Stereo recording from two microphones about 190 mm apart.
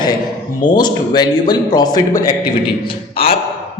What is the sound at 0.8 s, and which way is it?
A man's voice, 20° left (ahead or behind).